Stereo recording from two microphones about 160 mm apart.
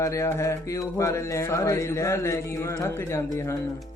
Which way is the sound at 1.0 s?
20° left (ahead or behind).